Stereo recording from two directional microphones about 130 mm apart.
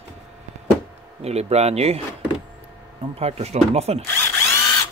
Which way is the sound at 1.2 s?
55° right (ahead or behind).